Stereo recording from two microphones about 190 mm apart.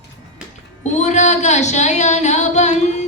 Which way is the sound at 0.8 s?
35° left (ahead or behind).